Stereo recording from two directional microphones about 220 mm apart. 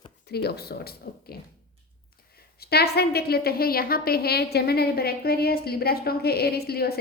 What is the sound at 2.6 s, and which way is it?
A woman's voice, 45° left (ahead or behind).